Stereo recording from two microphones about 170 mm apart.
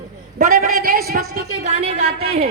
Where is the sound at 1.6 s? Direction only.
45° right (ahead or behind).